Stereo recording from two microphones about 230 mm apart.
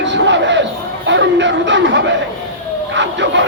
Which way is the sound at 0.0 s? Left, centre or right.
Right.